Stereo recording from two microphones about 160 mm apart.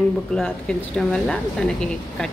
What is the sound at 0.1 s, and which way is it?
Speech, 5° left (ahead or behind).